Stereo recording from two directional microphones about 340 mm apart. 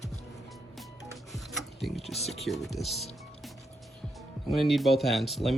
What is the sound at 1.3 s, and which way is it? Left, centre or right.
Music, centre.